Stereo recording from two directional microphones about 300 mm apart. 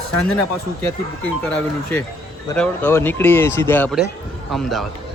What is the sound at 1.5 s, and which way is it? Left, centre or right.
A man's voice, centre.